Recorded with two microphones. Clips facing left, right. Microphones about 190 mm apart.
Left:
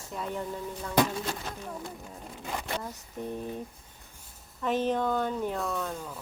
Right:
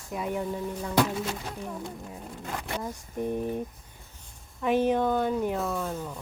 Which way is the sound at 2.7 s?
15° right (ahead or behind).